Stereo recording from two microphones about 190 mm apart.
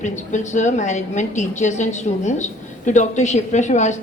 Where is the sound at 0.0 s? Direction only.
40° left (ahead or behind).